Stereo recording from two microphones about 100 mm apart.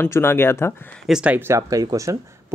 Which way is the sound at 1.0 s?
5° right (ahead or behind).